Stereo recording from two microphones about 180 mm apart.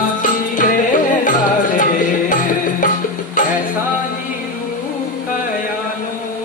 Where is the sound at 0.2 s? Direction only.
45° left (ahead or behind).